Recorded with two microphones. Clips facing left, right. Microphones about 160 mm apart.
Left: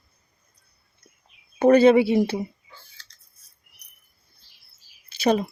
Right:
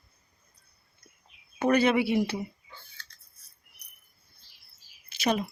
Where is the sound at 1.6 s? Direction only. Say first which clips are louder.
Left 9 dB; 30° left (ahead or behind).